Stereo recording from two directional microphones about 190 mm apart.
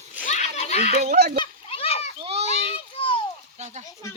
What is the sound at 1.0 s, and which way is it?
Speech, 55° right (ahead or behind).